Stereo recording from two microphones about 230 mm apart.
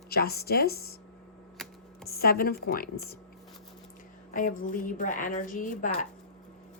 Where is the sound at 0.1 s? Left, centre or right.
Left.